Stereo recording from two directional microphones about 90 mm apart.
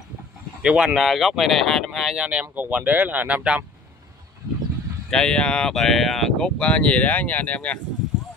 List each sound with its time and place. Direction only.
0.6 s speech: 10° right (ahead or behind)
5.1 s speech: 10° left (ahead or behind)